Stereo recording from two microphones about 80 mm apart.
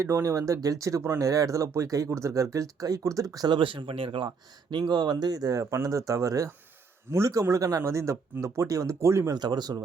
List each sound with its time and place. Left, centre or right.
0.0 s speech: right
3.5 s speech: right
4.7 s speech: right
9.3 s speech: right